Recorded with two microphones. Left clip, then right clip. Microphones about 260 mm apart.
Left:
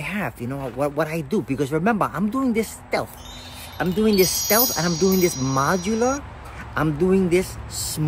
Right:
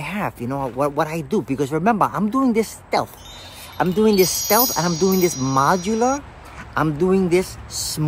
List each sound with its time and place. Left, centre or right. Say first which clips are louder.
0.0 s speech: right 2 dB; centre
3.7 s speech: right 4 dB; centre
4.2 s wind chime: right 2 dB; centre
5.6 s speech: right 4 dB; centre
5.9 s wind chime: right 2 dB; centre
6.7 s speech: right 2 dB; centre